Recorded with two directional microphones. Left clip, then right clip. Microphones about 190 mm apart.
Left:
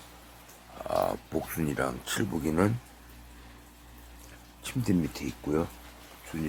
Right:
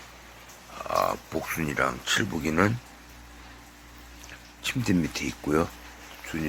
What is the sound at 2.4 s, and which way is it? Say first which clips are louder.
Speech: even; 15° left (ahead or behind).